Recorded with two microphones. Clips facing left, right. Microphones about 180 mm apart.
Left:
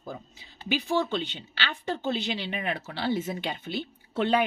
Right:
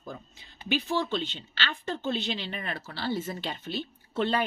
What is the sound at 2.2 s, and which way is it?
Speech, 10° left (ahead or behind).